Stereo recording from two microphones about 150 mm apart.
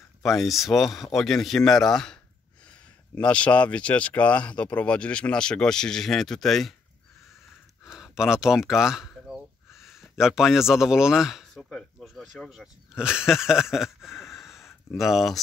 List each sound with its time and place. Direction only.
0.2 s speech: centre (ahead or behind)
3.2 s speech: 10° left (ahead or behind)
7.8 s speech: 5° right (ahead or behind)
14.5 s a sound: 20° left (ahead or behind)
15.0 s speech: centre (ahead or behind)